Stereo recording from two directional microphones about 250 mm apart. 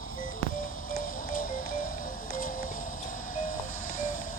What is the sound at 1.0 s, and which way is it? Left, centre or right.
Music, left.